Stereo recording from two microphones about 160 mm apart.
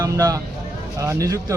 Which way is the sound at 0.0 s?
20° right (ahead or behind).